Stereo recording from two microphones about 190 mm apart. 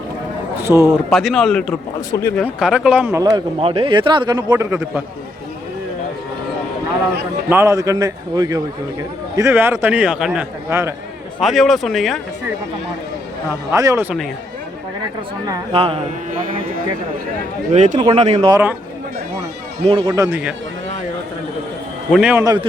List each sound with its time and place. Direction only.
0.6 s a man's voice: 10° right (ahead or behind)
1.1 s speech: centre (ahead or behind)
3.2 s a man's voice: 25° right (ahead or behind)
7.5 s a man's voice: 15° right (ahead or behind)
11.3 s speech: centre (ahead or behind)
13.7 s a man's voice: 15° right (ahead or behind)
15.4 s a man's voice: 25° right (ahead or behind)
17.7 s a man's voice: 40° right (ahead or behind)
17.9 s a man's voice: 20° right (ahead or behind)
18.2 s a man's voice: 35° right (ahead or behind)
19.8 s a man's voice: 30° right (ahead or behind)
20.1 s a man's voice: 15° right (ahead or behind)
22.1 s a man's voice: 5° right (ahead or behind)